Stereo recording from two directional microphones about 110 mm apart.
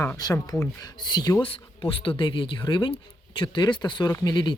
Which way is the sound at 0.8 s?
40° left (ahead or behind).